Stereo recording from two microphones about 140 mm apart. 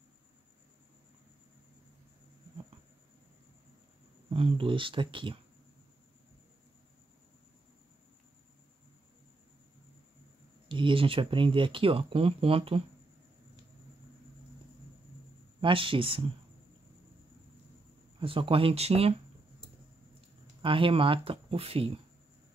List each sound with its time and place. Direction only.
4.3 s speech: 40° right (ahead or behind)
10.7 s speech: 35° right (ahead or behind)
15.6 s speech: 40° right (ahead or behind)
18.2 s speech: 40° right (ahead or behind)
20.6 s speech: 40° right (ahead or behind)